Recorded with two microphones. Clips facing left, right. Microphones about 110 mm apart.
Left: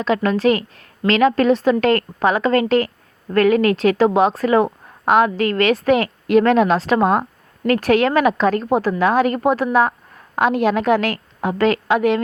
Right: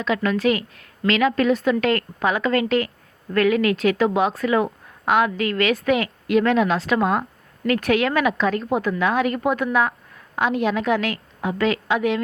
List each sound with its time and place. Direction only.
0.0 s a woman's voice: 35° left (ahead or behind)
10.3 s a woman's voice: 55° left (ahead or behind)